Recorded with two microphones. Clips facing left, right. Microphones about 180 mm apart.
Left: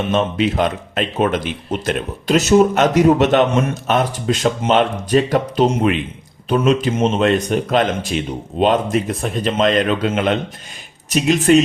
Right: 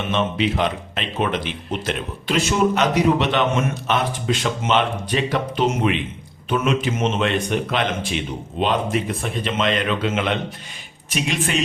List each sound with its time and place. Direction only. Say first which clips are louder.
0.1 s speech: left 2 dB; 45° left (ahead or behind)